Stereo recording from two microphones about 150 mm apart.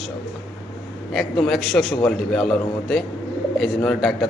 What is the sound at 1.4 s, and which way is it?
A man's voice, centre (ahead or behind).